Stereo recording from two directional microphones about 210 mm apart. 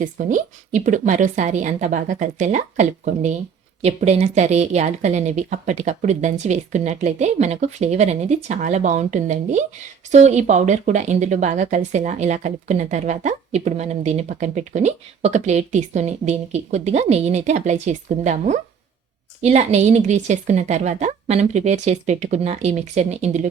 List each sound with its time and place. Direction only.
0.0 s speech: 40° right (ahead or behind)